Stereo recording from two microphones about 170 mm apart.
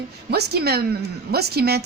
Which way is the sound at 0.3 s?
70° right (ahead or behind).